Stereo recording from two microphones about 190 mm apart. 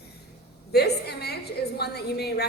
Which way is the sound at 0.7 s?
60° left (ahead or behind).